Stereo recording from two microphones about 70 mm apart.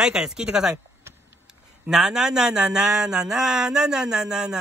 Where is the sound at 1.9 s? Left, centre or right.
Centre.